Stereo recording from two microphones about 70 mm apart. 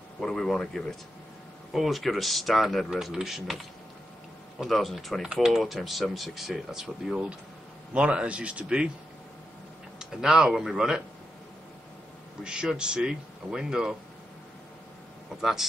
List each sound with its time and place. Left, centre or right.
0.2 s speech: centre
4.6 s speech: centre
9.9 s speech: centre
12.4 s speech: centre